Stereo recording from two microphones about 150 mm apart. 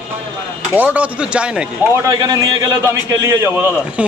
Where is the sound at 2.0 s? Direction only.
25° right (ahead or behind).